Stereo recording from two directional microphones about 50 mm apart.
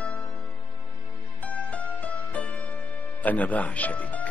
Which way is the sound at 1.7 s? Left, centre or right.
Left.